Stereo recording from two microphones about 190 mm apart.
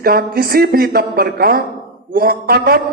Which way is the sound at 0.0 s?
55° right (ahead or behind).